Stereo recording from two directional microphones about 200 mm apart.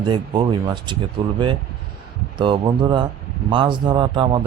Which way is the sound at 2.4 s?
25° right (ahead or behind).